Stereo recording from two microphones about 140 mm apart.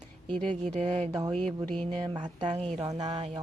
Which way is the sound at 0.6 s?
50° right (ahead or behind).